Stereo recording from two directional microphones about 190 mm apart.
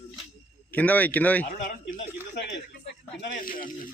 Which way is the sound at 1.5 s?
45° left (ahead or behind).